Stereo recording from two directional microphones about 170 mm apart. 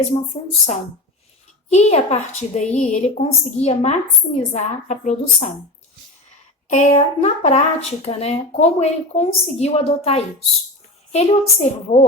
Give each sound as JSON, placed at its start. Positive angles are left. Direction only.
{"t": 1.7, "sound": "a woman's voice", "side_deg": 40}
{"t": 6.7, "sound": "speech", "side_deg": 45}